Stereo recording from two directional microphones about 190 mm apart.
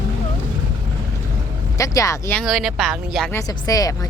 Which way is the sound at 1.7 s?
15° left (ahead or behind).